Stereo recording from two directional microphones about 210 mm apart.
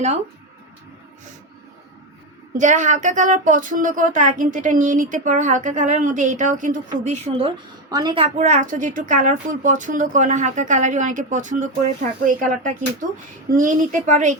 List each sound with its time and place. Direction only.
2.6 s speech: 35° right (ahead or behind)